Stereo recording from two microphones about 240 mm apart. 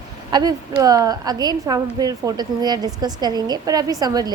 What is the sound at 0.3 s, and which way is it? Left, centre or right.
A woman's voice, centre.